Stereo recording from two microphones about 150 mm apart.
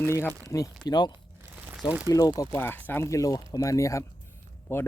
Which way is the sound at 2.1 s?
25° left (ahead or behind).